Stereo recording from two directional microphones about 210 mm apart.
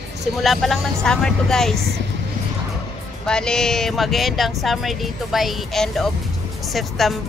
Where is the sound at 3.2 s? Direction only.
5° left (ahead or behind).